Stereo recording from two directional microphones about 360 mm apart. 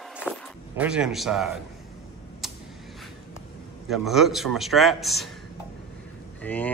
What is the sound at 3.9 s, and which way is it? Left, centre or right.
A man's voice, centre.